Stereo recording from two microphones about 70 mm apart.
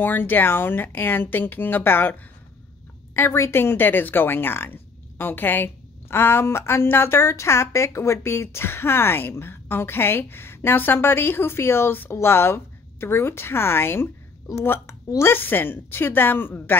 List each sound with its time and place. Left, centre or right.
0.0 s speech: left
3.2 s speech: left